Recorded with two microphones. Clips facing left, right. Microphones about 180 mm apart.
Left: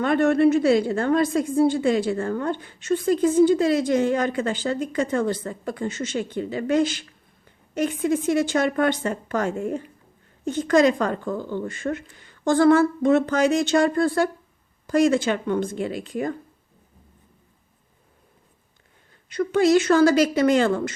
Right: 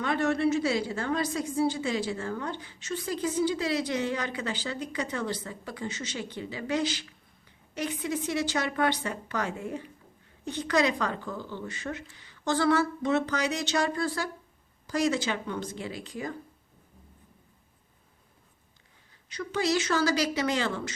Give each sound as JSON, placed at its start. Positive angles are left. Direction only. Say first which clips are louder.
{"t": 0.0, "sound": "a woman's voice", "louder": "left 8 dB", "side_deg": 55}
{"t": 19.3, "sound": "a woman's voice", "louder": "left 10 dB", "side_deg": 55}